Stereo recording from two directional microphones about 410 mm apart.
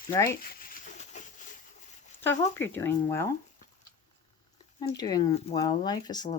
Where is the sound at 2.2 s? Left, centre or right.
Centre.